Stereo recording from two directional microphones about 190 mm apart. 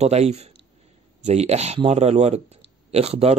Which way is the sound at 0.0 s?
35° right (ahead or behind).